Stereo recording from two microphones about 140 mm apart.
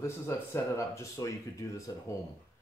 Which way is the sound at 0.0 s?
20° left (ahead or behind).